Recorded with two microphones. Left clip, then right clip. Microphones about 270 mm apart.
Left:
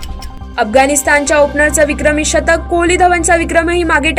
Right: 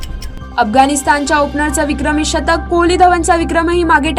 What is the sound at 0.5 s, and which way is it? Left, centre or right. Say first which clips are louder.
A woman's voice: even; right.